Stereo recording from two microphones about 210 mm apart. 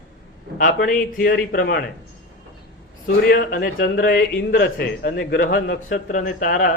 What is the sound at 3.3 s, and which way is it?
A man's voice, 45° left (ahead or behind).